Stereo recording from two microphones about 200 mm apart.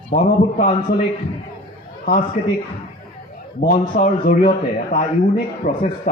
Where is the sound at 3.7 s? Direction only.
40° left (ahead or behind).